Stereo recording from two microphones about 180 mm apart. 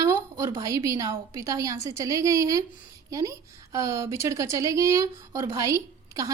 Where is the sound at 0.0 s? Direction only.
15° right (ahead or behind).